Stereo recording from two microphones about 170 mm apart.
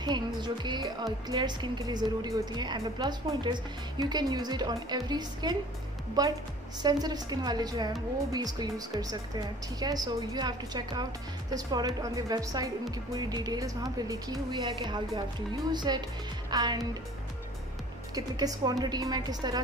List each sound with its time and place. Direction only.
0.0 s a woman's voice: 25° right (ahead or behind)
18.1 s a woman's voice: 20° right (ahead or behind)